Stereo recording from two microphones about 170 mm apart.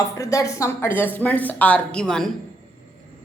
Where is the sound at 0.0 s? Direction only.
20° left (ahead or behind); by 2.3 s 5° left (ahead or behind).